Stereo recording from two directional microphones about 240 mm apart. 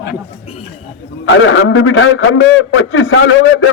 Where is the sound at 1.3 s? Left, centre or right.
Left.